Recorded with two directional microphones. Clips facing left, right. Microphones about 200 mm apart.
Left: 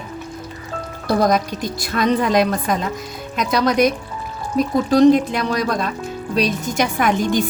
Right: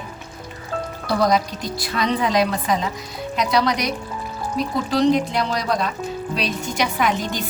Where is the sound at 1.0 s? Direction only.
50° left (ahead or behind).